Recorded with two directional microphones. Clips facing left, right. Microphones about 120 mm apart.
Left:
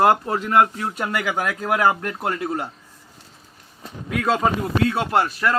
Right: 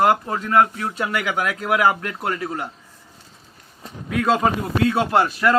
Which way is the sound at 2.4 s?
20° left (ahead or behind).